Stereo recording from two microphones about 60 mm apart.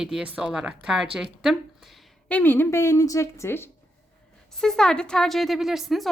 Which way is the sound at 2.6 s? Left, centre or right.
Left.